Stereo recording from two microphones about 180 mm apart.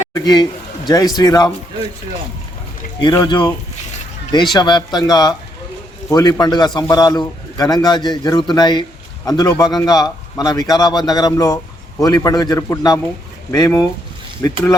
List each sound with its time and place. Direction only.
0.1 s a man's voice: 25° left (ahead or behind)
3.0 s a man's voice: 25° left (ahead or behind)
4.5 s a man's voice: 25° left (ahead or behind)